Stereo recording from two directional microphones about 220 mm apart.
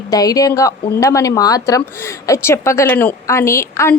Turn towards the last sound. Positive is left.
turn(degrees=15)  # may be behind; listen again after turning